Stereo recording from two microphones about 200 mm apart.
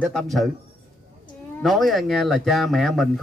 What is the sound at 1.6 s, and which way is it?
A man's voice, centre (ahead or behind).